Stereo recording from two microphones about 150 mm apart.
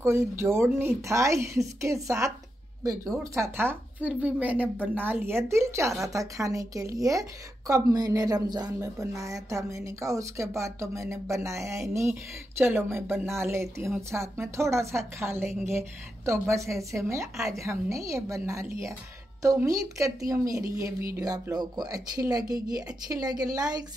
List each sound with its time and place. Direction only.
0.0 s a woman's voice: 15° right (ahead or behind)